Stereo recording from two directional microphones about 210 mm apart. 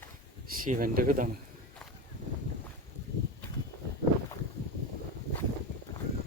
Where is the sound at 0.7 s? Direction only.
40° right (ahead or behind).